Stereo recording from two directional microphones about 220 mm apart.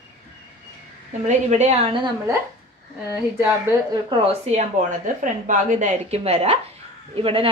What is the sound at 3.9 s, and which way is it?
A woman's voice, 30° right (ahead or behind).